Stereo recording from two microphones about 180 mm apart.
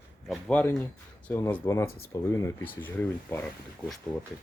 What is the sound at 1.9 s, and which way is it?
Speech, 55° left (ahead or behind).